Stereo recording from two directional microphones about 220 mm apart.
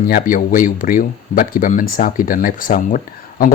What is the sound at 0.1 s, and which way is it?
Speech, 40° left (ahead or behind).